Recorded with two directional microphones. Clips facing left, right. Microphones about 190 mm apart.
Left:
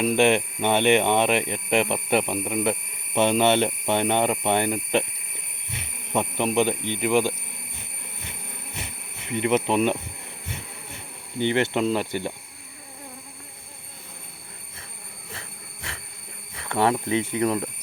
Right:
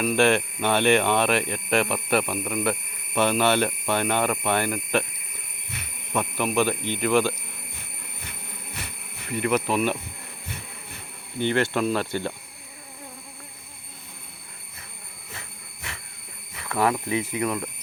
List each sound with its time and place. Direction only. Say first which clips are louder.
0.0 s speech: left 1 dB; 20° left (ahead or behind)
6.1 s speech: left 1 dB; 20° left (ahead or behind)
9.3 s speech: left 2 dB; 25° left (ahead or behind)
11.3 s speech: left 1 dB; 20° left (ahead or behind)
15.3 s a sound: left 2 dB; 30° left (ahead or behind)
16.6 s speech: left 1 dB; 30° left (ahead or behind)